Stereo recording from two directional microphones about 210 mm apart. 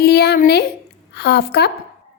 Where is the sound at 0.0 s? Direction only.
50° left (ahead or behind).